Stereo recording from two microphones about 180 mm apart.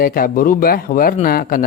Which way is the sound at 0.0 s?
55° left (ahead or behind).